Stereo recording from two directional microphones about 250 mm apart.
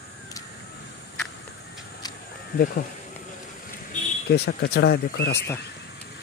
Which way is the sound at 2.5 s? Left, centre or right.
Left.